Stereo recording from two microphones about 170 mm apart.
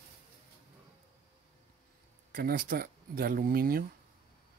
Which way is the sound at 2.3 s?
55° right (ahead or behind).